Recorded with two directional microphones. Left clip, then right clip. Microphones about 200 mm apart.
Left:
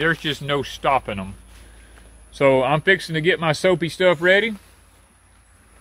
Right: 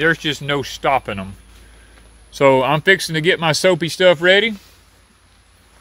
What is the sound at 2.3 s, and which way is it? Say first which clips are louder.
Speech: right 3 dB; 35° right (ahead or behind).